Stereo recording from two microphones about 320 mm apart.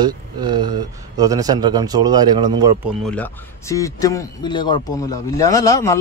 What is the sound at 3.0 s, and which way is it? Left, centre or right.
Speech, centre.